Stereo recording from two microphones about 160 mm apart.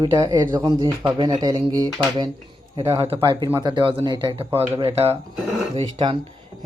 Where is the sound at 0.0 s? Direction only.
25° right (ahead or behind).